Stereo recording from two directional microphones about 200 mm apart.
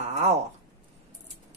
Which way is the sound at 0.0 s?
35° right (ahead or behind).